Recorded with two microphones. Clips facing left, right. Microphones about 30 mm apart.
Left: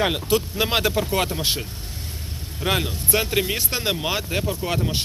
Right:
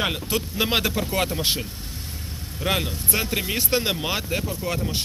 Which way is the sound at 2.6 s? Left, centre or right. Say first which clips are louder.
Left 1 dB; centre.